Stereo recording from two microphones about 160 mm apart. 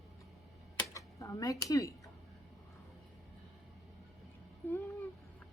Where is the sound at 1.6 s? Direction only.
20° left (ahead or behind).